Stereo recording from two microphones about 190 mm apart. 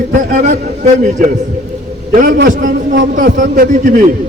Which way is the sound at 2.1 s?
50° right (ahead or behind).